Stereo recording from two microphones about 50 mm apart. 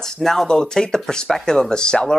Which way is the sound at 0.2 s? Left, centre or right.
Centre.